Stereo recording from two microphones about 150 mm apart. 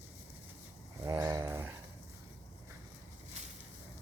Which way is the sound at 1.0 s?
20° right (ahead or behind).